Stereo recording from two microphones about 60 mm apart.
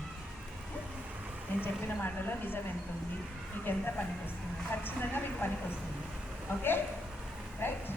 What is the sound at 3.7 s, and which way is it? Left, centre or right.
A woman's voice, left.